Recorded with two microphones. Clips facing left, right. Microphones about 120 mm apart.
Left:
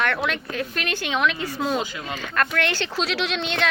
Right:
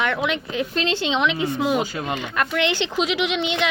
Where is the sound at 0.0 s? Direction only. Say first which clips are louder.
Right 2 dB; 15° right (ahead or behind).